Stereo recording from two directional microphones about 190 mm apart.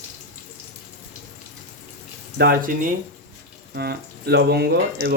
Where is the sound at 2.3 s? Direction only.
55° right (ahead or behind).